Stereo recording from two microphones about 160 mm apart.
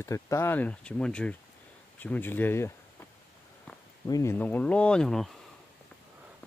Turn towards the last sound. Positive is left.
turn(degrees=5)  # may be behind; listen again after turning